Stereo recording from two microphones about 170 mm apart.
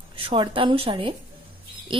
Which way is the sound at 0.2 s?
30° right (ahead or behind).